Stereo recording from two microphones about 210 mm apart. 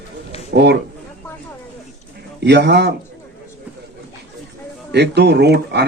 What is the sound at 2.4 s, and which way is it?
Speech, 55° right (ahead or behind).